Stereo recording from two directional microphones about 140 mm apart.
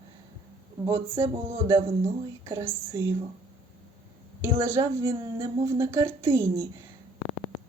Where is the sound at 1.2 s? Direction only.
20° right (ahead or behind).